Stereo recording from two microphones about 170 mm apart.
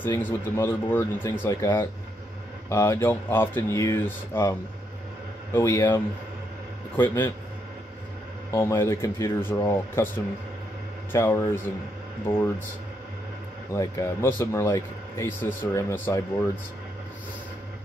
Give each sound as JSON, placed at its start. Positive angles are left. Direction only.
{"t": 0.0, "sound": "speech", "side_deg": 15}
{"t": 7.0, "sound": "speech", "side_deg": 10}
{"t": 8.5, "sound": "speech", "side_deg": 15}
{"t": 11.1, "sound": "speech", "side_deg": 15}
{"t": 13.7, "sound": "speech", "side_deg": 20}